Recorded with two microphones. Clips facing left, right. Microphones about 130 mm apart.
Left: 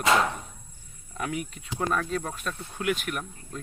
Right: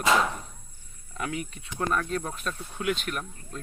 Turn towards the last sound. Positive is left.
turn(degrees=5)  # may be behind; listen again after turning